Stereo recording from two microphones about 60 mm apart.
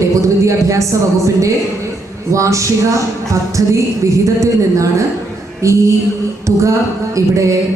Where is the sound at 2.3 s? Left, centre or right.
Right.